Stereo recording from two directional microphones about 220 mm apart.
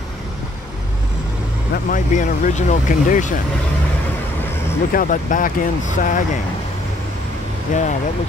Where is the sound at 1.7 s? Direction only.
35° left (ahead or behind).